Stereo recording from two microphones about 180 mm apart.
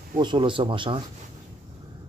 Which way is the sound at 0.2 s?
25° right (ahead or behind).